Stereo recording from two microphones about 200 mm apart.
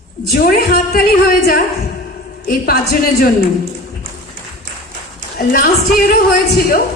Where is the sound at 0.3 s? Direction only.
45° left (ahead or behind).